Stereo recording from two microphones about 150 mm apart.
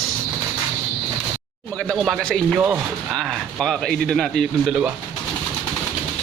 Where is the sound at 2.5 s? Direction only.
10° right (ahead or behind).